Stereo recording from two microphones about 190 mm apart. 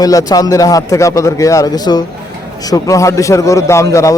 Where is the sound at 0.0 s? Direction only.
20° left (ahead or behind).